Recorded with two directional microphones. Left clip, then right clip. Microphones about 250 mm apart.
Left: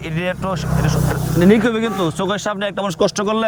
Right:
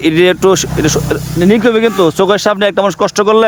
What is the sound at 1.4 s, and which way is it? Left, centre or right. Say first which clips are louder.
Speech: right 5 dB; right.